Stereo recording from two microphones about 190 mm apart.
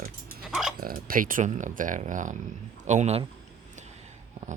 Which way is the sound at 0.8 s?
45° right (ahead or behind).